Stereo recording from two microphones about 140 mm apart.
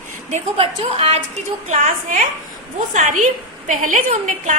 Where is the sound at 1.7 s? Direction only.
60° right (ahead or behind).